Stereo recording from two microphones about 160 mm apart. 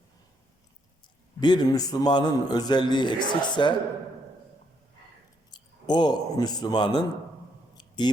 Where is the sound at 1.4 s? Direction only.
25° left (ahead or behind).